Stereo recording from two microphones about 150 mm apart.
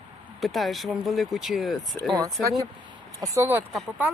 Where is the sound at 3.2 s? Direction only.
20° right (ahead or behind).